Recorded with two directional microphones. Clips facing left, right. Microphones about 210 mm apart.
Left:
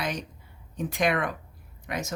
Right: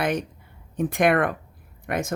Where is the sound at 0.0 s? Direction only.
55° right (ahead or behind).